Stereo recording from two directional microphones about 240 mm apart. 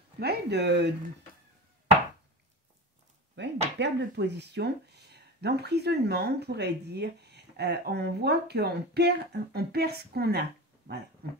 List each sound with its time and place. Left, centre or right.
0.2 s speech: right
3.4 s dishes: right
3.7 s speech: right